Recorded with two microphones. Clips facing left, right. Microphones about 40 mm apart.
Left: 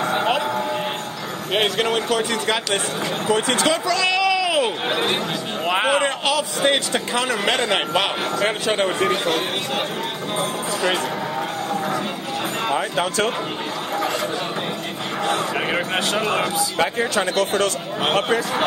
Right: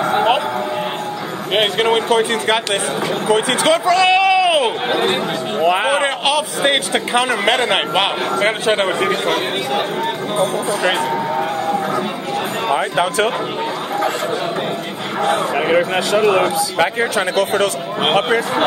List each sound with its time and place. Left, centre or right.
0.0 s music: centre
1.5 s a man's voice: right
4.8 s speech: centre
5.9 s a man's voice: right
10.8 s a sound: right
15.2 s speech: centre
16.7 s speech: right
17.1 s speech: right